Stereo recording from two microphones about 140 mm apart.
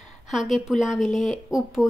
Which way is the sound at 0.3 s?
Centre (ahead or behind).